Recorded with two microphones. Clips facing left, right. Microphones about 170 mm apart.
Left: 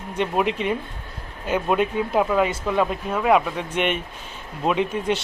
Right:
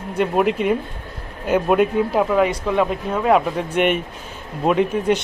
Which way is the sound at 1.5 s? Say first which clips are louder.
Right 5 dB; 5° right (ahead or behind).